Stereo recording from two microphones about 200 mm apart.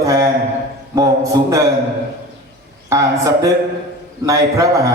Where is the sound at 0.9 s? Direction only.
15° right (ahead or behind).